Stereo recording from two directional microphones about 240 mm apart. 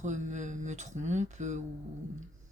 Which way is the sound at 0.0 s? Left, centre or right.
Right.